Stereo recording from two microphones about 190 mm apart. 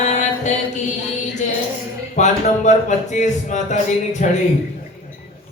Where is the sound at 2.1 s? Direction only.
40° left (ahead or behind).